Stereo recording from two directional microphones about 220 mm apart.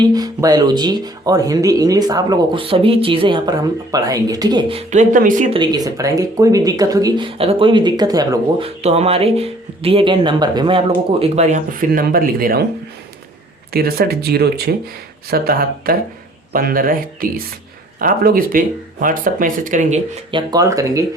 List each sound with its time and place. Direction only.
0.0 s speech: 15° right (ahead or behind); by 5.5 s 35° right (ahead or behind)
5.5 s speech: 15° right (ahead or behind); by 12.6 s 40° right (ahead or behind)
13.7 s speech: 45° right (ahead or behind)
20.3 s speech: 15° right (ahead or behind)